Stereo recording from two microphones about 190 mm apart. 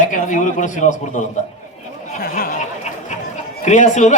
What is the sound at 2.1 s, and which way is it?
Speech, 50° left (ahead or behind).